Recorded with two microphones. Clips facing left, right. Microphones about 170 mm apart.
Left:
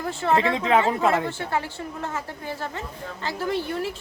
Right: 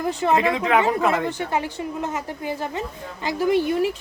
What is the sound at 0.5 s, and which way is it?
Speech, 30° left (ahead or behind).